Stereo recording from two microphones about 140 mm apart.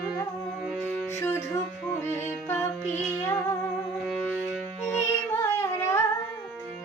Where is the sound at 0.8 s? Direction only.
15° left (ahead or behind).